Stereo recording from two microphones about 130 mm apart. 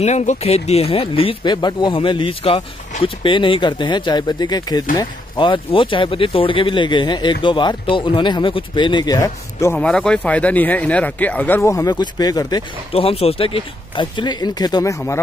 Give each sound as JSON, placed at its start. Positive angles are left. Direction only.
{"t": 0.0, "sound": "speech", "side_deg": 60}
{"t": 9.8, "sound": "speech", "side_deg": 5}
{"t": 12.9, "sound": "speech", "side_deg": 50}